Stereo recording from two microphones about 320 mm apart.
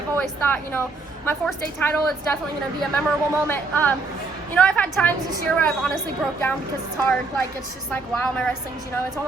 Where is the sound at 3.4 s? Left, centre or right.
Centre.